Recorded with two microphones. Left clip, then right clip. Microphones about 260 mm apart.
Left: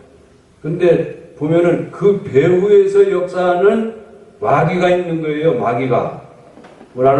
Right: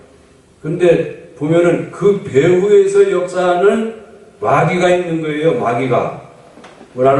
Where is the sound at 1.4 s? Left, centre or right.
Centre.